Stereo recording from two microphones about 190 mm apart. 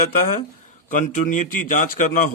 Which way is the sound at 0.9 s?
40° left (ahead or behind).